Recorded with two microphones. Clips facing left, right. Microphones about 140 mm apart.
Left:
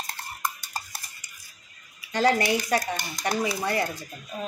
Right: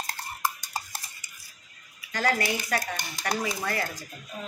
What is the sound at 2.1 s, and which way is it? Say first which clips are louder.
Dishes: left 5 dB; 25° left (ahead or behind).